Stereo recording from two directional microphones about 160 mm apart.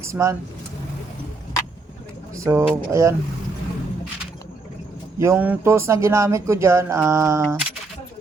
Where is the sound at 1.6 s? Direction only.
20° left (ahead or behind).